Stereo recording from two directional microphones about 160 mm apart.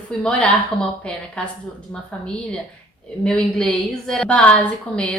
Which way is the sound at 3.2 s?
5° left (ahead or behind).